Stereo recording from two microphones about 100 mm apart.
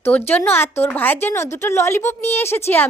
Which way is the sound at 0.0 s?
20° left (ahead or behind).